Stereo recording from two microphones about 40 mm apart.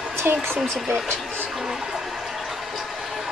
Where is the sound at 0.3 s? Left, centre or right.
Right.